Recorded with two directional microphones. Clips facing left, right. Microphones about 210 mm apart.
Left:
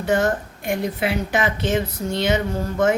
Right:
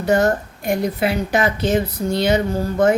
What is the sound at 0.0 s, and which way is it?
A woman's voice, 40° right (ahead or behind).